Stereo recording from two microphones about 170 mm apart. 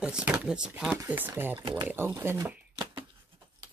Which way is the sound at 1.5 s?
25° right (ahead or behind).